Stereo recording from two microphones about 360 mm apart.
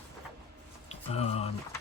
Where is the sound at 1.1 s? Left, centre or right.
Centre.